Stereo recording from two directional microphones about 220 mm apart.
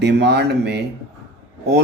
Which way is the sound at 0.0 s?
50° right (ahead or behind).